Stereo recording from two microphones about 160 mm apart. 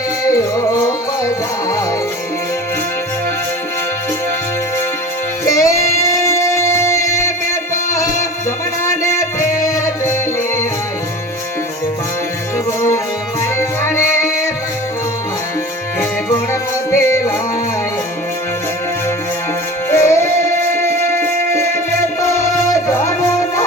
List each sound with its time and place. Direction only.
0.3 s music: 20° left (ahead or behind)
5.5 s music: 20° left (ahead or behind)
8.8 s music: 15° left (ahead or behind)
13.6 s music: 15° left (ahead or behind)
16.0 s music: 15° left (ahead or behind)
19.9 s music: 15° left (ahead or behind)